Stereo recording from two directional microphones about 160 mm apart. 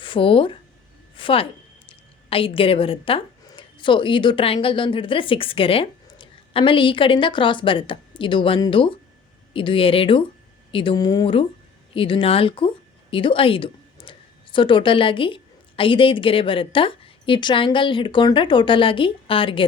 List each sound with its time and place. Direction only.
0.0 s a woman's voice: 35° left (ahead or behind)